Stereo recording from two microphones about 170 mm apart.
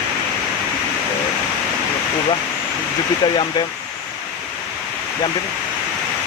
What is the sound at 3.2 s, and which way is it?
Speech, 25° left (ahead or behind).